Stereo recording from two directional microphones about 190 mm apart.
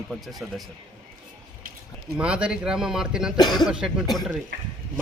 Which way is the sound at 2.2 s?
5° right (ahead or behind).